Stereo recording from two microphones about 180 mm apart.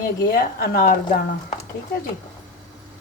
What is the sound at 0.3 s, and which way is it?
Speech, 55° left (ahead or behind).